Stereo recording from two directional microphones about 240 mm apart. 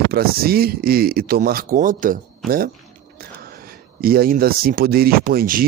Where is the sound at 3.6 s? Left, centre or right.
Right.